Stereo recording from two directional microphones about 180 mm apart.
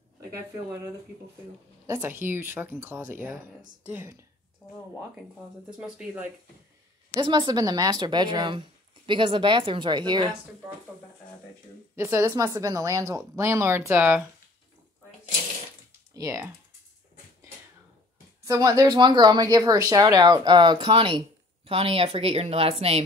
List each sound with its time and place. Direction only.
1.9 s speech: 10° right (ahead or behind)
4.6 s speech: 25° left (ahead or behind)
5.8 s speech: 5° right (ahead or behind)
7.2 s speech: 25° right (ahead or behind)
11.9 s speech: 15° right (ahead or behind)
16.2 s speech: 15° right (ahead or behind)
18.4 s a woman's voice: 20° right (ahead or behind); by 23.0 s 35° right (ahead or behind)